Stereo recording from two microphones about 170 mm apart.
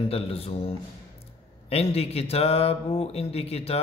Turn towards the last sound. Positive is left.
turn(degrees=35)  # may be behind; listen again after turning